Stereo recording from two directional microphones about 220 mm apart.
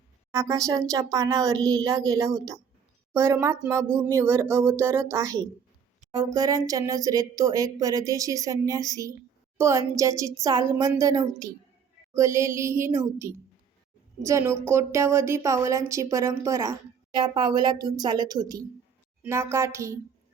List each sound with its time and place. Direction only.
0.3 s a woman's voice: 15° right (ahead or behind)